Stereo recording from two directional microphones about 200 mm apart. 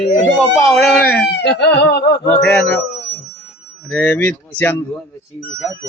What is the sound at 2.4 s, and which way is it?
Speech, 10° left (ahead or behind).